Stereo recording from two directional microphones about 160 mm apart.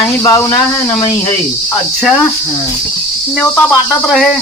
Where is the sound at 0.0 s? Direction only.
20° left (ahead or behind).